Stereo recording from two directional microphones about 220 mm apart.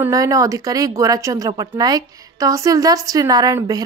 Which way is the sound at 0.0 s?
15° right (ahead or behind).